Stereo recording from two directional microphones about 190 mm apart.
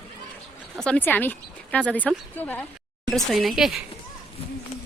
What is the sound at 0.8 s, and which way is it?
Speech, 5° left (ahead or behind).